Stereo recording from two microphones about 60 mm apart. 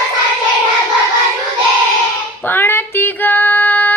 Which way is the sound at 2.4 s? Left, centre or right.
Left.